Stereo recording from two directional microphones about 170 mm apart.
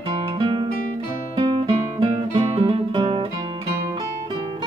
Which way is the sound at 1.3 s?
30° right (ahead or behind).